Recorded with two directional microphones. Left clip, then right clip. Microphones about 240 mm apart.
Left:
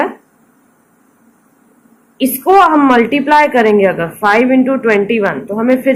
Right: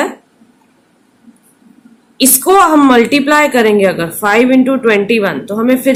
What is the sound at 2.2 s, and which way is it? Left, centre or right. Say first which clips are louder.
A woman's voice: even; centre.